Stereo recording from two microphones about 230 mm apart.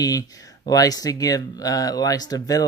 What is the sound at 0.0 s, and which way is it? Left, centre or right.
Speech, centre.